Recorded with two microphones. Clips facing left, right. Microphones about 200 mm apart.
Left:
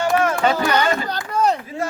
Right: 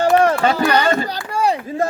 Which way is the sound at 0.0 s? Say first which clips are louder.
Right 5 dB; 35° right (ahead or behind).